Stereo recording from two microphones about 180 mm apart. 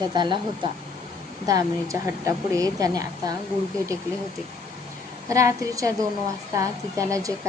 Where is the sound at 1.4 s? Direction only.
20° right (ahead or behind).